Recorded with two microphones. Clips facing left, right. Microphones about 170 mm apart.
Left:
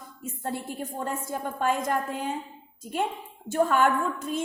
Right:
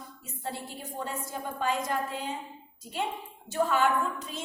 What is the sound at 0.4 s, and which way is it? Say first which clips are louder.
A woman's voice: left 5 dB; 50° left (ahead or behind).